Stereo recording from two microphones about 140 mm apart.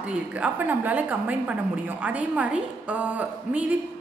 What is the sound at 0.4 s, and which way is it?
A woman's voice, 10° right (ahead or behind).